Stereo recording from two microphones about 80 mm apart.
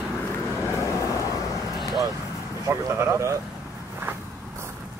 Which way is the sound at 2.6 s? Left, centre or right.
Right.